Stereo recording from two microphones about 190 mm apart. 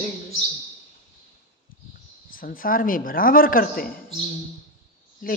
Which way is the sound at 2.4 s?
50° left (ahead or behind).